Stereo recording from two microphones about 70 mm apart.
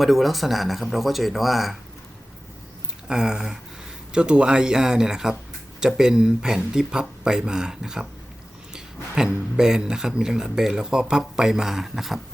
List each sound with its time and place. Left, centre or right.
0.0 s speech: centre
3.1 s speech: centre